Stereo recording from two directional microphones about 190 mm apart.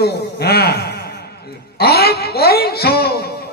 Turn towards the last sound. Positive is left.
turn(degrees=55)  # may be behind; listen again after turning